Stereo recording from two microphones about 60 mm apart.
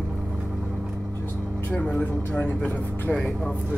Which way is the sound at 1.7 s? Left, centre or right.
Left.